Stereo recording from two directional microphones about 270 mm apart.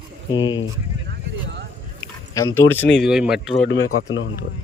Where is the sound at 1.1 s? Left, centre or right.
Right.